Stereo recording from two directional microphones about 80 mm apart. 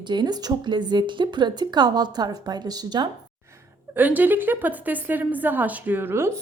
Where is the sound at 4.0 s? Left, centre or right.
Right.